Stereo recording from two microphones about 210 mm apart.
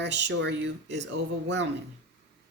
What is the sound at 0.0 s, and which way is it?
Speech, 55° right (ahead or behind).